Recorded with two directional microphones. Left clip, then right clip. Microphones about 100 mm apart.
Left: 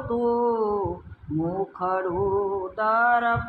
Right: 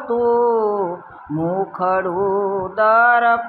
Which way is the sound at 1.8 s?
50° right (ahead or behind).